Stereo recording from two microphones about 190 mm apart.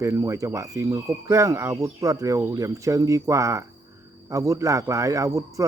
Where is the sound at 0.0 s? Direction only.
15° right (ahead or behind).